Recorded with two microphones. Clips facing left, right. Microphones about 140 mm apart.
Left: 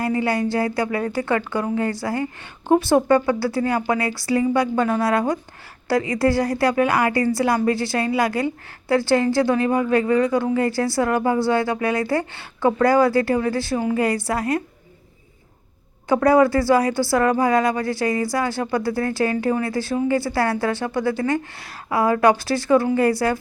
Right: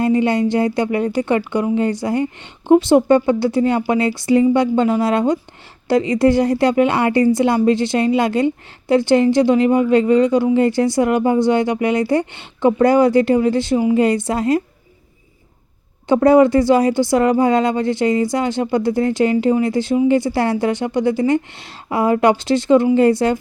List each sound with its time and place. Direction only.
0.0 s a woman's voice: 20° right (ahead or behind)
16.0 s a woman's voice: 25° right (ahead or behind)